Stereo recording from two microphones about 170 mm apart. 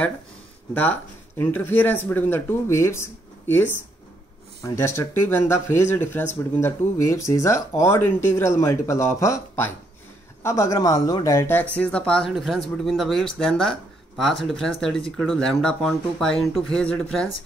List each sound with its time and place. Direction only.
1.4 s speech: 15° left (ahead or behind)
4.6 s speech: 15° left (ahead or behind)